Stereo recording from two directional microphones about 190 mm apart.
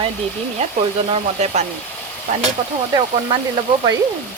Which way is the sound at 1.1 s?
35° right (ahead or behind).